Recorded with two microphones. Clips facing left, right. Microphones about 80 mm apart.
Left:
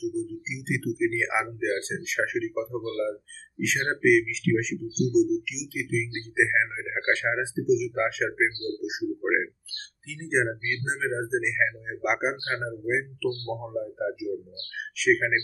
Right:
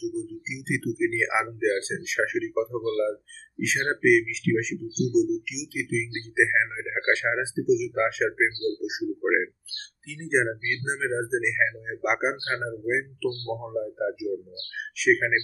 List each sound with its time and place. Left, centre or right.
0.0 s speech: centre
10.6 s speech: right
10.9 s speech: centre